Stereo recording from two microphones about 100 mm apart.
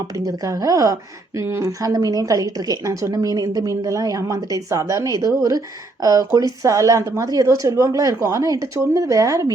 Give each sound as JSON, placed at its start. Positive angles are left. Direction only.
{"t": 0.3, "sound": "a woman's voice", "side_deg": -35}